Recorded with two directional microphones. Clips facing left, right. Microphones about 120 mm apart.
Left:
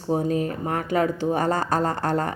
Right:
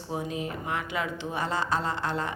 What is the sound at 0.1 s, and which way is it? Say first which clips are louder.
A woman's voice: left 9 dB; 40° left (ahead or behind).